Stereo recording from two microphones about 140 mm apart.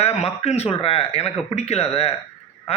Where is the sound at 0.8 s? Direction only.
45° left (ahead or behind).